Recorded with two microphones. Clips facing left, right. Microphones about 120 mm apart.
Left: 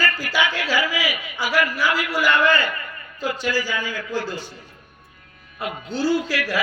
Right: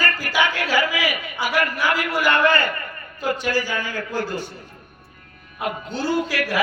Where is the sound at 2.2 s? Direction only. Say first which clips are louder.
Even; 50° right (ahead or behind).